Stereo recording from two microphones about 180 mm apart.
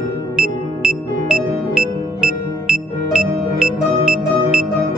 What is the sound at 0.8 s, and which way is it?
Music, 5° right (ahead or behind).